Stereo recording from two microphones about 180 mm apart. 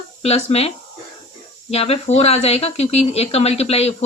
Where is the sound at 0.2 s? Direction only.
35° left (ahead or behind).